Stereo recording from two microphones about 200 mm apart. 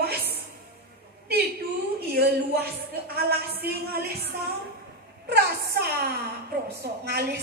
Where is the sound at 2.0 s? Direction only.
50° right (ahead or behind).